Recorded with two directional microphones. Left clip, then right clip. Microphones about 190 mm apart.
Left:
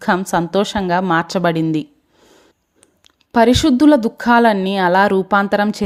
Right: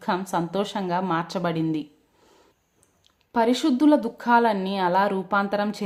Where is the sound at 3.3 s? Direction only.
40° left (ahead or behind).